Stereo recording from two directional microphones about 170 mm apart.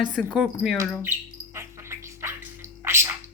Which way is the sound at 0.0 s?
5° right (ahead or behind).